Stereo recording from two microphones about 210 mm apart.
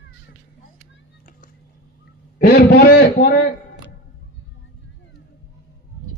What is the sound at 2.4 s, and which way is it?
A man's voice, 50° left (ahead or behind).